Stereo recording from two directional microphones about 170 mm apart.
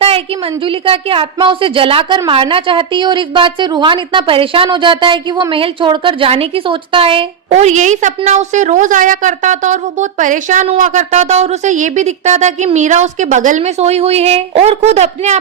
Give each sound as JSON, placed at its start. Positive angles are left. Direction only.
{"t": 0.0, "sound": "a woman's voice", "side_deg": -35}